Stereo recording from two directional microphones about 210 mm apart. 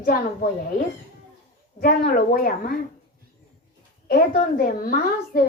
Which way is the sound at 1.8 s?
45° left (ahead or behind).